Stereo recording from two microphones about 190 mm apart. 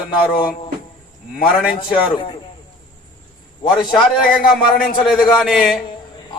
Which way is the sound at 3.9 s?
Centre (ahead or behind).